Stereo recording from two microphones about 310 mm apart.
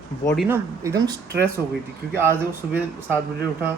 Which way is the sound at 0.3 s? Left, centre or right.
Centre.